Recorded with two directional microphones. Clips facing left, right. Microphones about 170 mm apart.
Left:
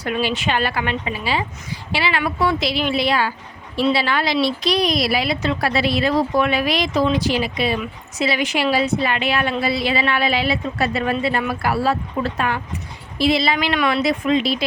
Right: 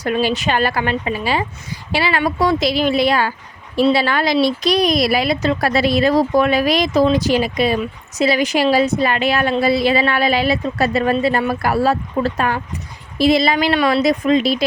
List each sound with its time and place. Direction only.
0.0 s speech: 40° right (ahead or behind)